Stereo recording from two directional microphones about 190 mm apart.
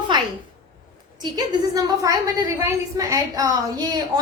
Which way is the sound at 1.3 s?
20° right (ahead or behind).